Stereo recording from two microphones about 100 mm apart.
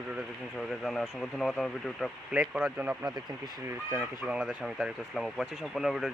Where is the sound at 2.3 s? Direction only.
15° right (ahead or behind).